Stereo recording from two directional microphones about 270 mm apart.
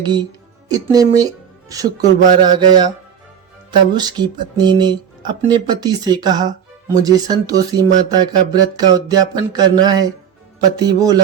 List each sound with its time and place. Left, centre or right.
0.7 s speech: centre